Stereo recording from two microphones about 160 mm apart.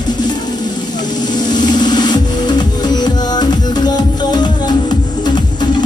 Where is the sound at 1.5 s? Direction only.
25° left (ahead or behind).